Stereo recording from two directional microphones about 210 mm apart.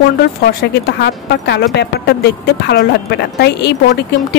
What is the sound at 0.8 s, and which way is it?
A woman's voice, 50° left (ahead or behind).